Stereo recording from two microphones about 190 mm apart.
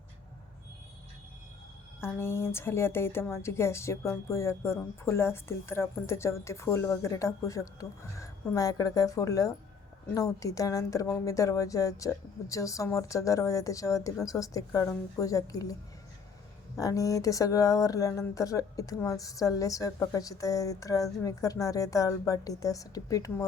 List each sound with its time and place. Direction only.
2.0 s a woman's voice: 15° left (ahead or behind)
16.7 s a woman's voice: 15° left (ahead or behind)